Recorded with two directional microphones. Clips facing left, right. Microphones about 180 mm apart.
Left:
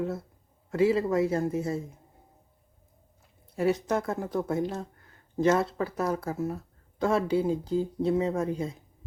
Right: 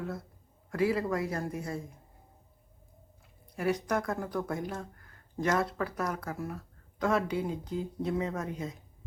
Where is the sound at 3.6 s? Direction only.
25° left (ahead or behind).